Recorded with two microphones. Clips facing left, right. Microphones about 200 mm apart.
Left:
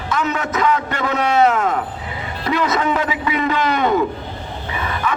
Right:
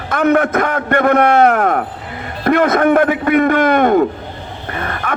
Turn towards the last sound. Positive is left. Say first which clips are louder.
# right 1 dB
turn(degrees=-55)  # may be behind; listen again after turning